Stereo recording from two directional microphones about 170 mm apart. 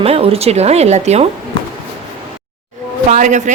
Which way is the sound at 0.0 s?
35° right (ahead or behind).